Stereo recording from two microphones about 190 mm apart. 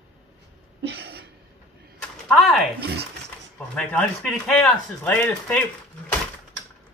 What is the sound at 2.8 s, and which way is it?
Speech, 55° right (ahead or behind).